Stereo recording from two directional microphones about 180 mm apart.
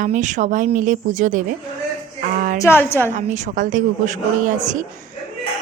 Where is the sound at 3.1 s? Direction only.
40° right (ahead or behind).